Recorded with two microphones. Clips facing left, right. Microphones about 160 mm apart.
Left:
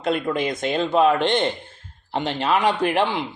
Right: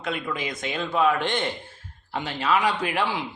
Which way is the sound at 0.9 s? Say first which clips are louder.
Left 4 dB; 25° left (ahead or behind).